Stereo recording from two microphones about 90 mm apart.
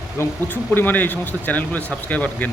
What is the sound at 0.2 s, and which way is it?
Speech, 25° left (ahead or behind).